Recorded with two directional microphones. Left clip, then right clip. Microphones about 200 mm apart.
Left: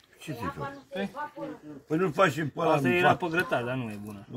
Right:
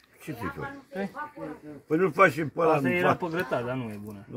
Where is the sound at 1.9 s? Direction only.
40° left (ahead or behind).